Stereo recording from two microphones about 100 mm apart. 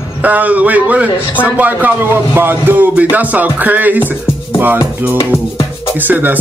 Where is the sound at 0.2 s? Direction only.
15° right (ahead or behind).